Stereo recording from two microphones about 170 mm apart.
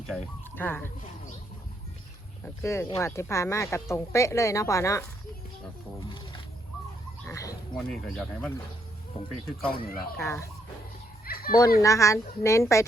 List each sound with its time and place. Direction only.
0.1 s speech: 5° left (ahead or behind)
2.4 s speech: 15° left (ahead or behind)
7.3 s speech: 20° left (ahead or behind)
7.9 s speech: 5° left (ahead or behind)
9.6 s speech: 60° left (ahead or behind)
10.2 s speech: 15° left (ahead or behind)
11.3 s a sound: 60° left (ahead or behind)
11.8 s speech: 15° left (ahead or behind)